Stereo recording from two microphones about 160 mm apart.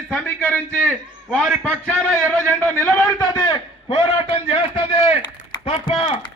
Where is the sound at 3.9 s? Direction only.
35° left (ahead or behind).